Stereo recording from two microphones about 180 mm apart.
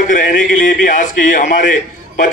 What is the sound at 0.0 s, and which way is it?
A man's voice, 45° left (ahead or behind).